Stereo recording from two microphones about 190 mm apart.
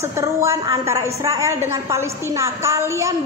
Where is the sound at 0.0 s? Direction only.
15° right (ahead or behind).